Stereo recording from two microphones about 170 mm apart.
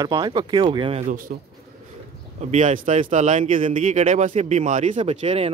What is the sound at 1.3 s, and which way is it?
Speech, 60° right (ahead or behind).